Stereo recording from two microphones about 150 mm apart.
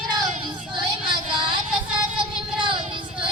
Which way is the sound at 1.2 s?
35° right (ahead or behind).